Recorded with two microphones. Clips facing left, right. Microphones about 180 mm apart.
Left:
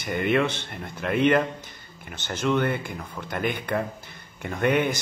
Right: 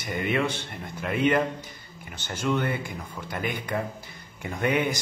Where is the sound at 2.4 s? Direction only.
60° left (ahead or behind).